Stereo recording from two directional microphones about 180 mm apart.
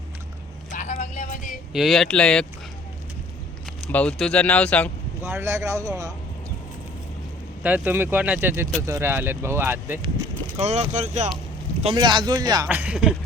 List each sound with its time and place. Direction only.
0.7 s vehicle: 40° left (ahead or behind)
1.7 s speech: centre (ahead or behind)
3.9 s speech: 5° left (ahead or behind)
5.2 s speech: 15° right (ahead or behind)
7.6 s speech: 10° right (ahead or behind)
10.6 s speech: 40° right (ahead or behind)
11.8 s speech: 30° right (ahead or behind)
12.6 s speech: 5° right (ahead or behind)